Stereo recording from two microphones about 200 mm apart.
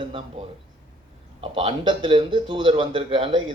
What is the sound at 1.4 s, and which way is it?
A man's voice, 25° right (ahead or behind).